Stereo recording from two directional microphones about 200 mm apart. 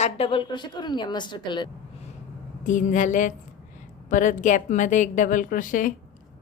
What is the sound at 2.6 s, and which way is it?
A woman's voice, 40° left (ahead or behind).